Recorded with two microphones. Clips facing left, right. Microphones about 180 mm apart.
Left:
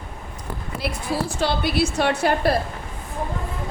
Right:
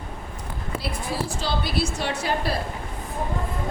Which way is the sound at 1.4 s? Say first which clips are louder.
Left 6 dB; 60° left (ahead or behind).